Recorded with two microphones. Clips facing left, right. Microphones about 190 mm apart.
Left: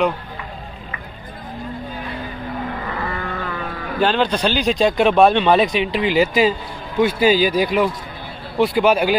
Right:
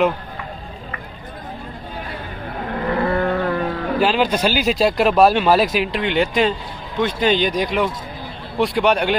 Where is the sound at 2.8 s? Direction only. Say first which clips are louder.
Right 7 dB; 55° right (ahead or behind).